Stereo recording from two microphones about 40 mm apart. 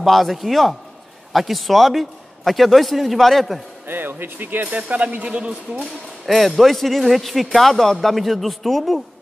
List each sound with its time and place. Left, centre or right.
0.0 s speech: centre
3.8 s speech: right
4.7 s speech: right
6.2 s speech: centre